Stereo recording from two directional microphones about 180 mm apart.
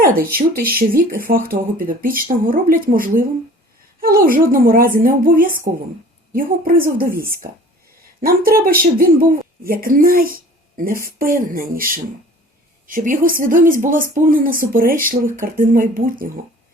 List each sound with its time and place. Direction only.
0.0 s speech: 55° right (ahead or behind)
8.2 s speech: 55° right (ahead or behind)
12.9 s speech: 50° right (ahead or behind)